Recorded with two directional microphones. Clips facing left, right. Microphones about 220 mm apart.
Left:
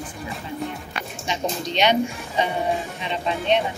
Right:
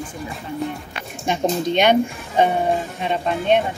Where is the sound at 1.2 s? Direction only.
50° right (ahead or behind).